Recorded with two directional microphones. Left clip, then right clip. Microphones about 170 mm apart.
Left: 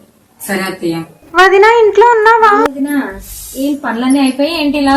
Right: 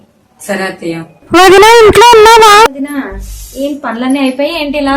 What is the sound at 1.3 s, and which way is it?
Speech, 65° right (ahead or behind).